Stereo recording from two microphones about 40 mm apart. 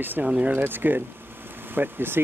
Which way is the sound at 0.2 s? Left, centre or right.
Right.